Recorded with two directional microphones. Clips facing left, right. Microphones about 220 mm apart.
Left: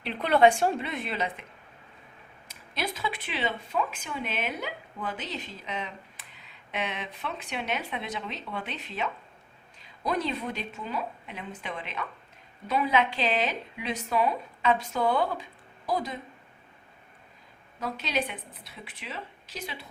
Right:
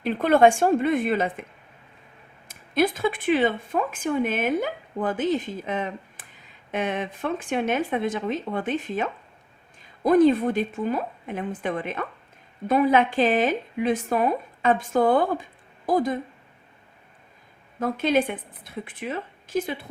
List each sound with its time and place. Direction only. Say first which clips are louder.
0.0 s speech: right 4 dB; 45° right (ahead or behind)
2.5 s speech: right 12 dB; 50° right (ahead or behind)
17.7 s speech: right 9 dB; 50° right (ahead or behind)